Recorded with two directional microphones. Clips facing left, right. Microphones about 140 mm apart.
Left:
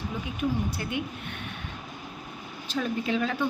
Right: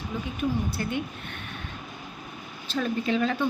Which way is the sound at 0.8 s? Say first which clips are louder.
Right 2 dB; 10° left (ahead or behind).